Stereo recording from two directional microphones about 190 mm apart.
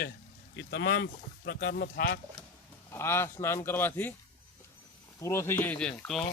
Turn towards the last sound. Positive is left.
turn(degrees=5)  # may be behind; listen again after turning